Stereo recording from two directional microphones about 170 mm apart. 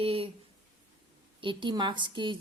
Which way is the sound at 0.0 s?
35° right (ahead or behind).